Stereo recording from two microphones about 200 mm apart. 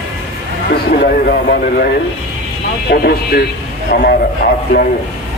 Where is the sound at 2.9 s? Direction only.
50° left (ahead or behind).